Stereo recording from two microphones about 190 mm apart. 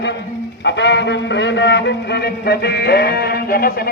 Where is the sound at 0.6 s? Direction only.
65° left (ahead or behind).